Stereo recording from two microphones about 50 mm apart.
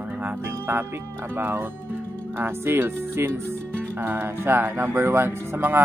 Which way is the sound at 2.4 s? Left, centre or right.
Right.